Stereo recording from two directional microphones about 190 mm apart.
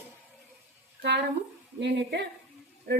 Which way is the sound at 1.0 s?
65° right (ahead or behind).